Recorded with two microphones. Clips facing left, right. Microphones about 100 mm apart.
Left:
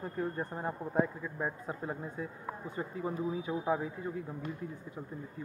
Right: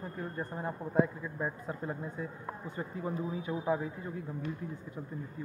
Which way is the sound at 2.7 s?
15° left (ahead or behind).